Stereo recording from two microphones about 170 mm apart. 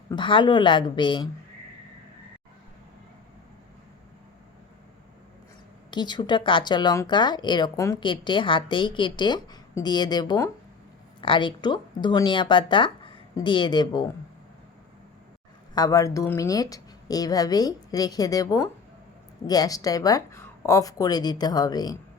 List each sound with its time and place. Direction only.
0.1 s speech: 30° left (ahead or behind)
5.9 s speech: 25° left (ahead or behind)
15.7 s speech: 20° left (ahead or behind)